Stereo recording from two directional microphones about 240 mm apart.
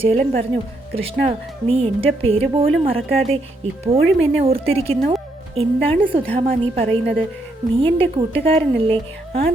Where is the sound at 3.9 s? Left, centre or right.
Centre.